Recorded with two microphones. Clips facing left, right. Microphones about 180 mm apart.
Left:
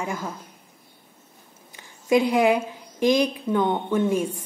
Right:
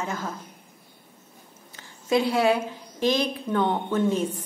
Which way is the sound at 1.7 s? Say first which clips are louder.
Left 3 dB; 15° left (ahead or behind).